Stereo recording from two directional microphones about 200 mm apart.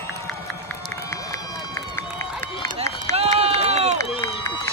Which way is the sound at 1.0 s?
15° left (ahead or behind).